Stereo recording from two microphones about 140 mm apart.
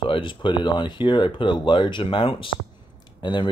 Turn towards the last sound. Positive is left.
turn(degrees=35)  # may be behind; listen again after turning